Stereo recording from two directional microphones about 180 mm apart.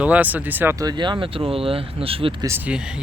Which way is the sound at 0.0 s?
10° right (ahead or behind).